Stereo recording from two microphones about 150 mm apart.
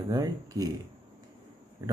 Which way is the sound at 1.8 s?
20° right (ahead or behind).